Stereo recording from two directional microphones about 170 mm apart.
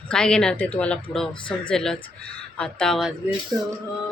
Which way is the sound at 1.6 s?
5° left (ahead or behind).